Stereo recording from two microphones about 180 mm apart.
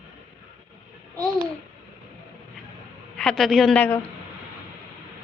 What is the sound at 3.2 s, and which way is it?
Speech, centre (ahead or behind).